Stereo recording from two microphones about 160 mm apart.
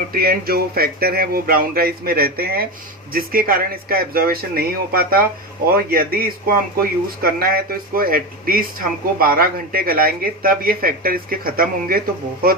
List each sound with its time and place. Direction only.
0.1 s speech: 70° right (ahead or behind)